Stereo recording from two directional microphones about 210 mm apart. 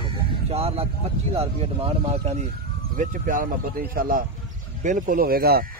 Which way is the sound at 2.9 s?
40° right (ahead or behind).